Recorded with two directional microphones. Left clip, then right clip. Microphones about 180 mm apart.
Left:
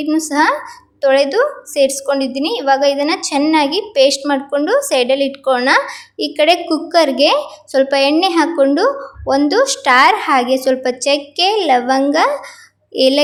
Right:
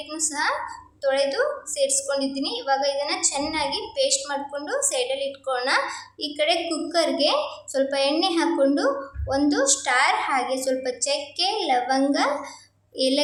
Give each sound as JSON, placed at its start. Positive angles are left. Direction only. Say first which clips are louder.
{"t": 0.1, "sound": "a woman's voice", "louder": "left 11 dB", "side_deg": 40}